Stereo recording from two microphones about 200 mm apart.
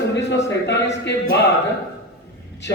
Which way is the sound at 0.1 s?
60° left (ahead or behind).